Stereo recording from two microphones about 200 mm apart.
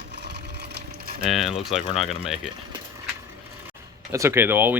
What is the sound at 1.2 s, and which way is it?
Speech, centre (ahead or behind).